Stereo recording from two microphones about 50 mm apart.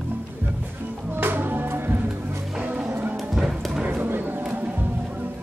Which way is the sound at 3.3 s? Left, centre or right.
Centre.